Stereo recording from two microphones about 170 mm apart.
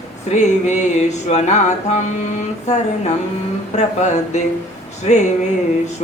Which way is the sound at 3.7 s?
40° left (ahead or behind).